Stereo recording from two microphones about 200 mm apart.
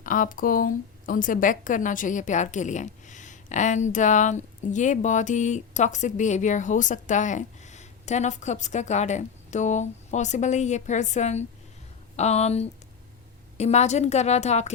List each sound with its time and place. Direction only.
0.0 s a woman's voice: 40° left (ahead or behind)